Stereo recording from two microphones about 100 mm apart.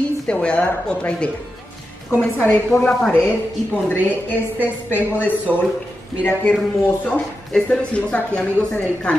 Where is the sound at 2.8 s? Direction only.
15° left (ahead or behind).